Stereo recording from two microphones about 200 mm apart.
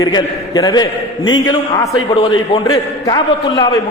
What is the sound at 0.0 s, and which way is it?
A man's voice, 20° left (ahead or behind).